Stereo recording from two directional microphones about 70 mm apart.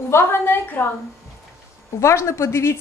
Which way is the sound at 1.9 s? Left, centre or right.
Left.